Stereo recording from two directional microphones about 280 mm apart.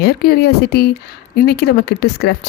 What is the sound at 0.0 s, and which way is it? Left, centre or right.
Speech, left.